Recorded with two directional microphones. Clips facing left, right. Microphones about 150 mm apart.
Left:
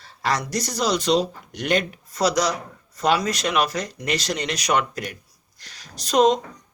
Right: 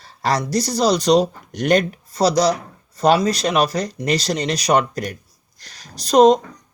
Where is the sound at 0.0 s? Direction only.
35° right (ahead or behind).